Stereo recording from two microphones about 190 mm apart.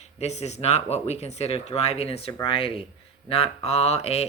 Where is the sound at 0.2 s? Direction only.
35° left (ahead or behind).